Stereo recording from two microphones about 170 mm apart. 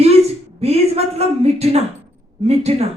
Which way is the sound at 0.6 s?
40° right (ahead or behind).